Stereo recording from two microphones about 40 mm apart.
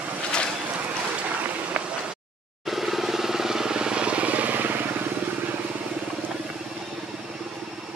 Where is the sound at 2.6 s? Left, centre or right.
Centre; by 4.9 s right.